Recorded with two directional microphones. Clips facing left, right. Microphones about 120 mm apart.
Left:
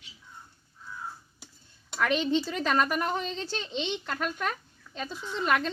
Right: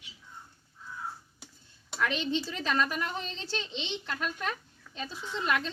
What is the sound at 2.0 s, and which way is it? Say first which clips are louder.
A woman's voice: left 4 dB; 50° left (ahead or behind).